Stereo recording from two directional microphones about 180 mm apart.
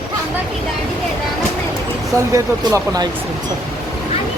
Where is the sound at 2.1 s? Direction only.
15° right (ahead or behind).